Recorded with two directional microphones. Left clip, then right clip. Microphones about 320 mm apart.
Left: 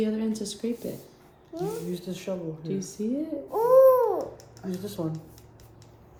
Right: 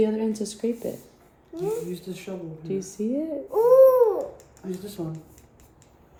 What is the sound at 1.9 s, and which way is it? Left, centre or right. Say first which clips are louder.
Speech: even; centre.